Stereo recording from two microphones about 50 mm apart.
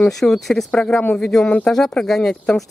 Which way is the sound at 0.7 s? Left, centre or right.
Centre.